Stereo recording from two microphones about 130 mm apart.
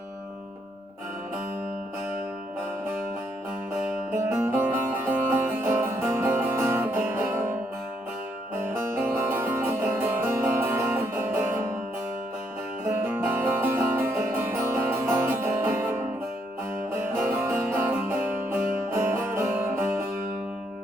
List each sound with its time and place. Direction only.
4.1 s music: 20° right (ahead or behind)
8.5 s music: 20° right (ahead or behind)
12.8 s music: 15° right (ahead or behind)